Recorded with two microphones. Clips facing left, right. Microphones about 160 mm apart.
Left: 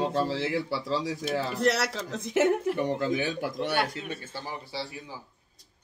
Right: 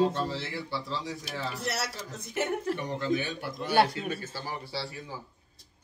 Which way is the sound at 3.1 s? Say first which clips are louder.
Left 2 dB; 90° left.